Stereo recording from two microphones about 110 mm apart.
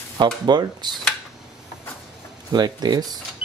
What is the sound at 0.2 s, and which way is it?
Speech, 40° right (ahead or behind).